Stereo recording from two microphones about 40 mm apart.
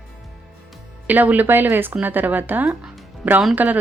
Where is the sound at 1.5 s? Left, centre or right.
Right.